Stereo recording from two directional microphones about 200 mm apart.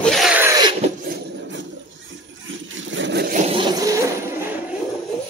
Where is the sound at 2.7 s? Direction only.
70° right (ahead or behind).